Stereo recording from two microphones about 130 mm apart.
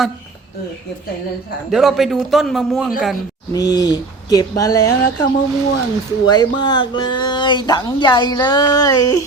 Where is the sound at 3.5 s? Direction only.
30° left (ahead or behind).